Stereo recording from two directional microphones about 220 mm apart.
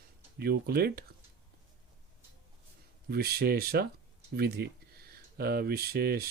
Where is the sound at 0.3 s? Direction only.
45° right (ahead or behind).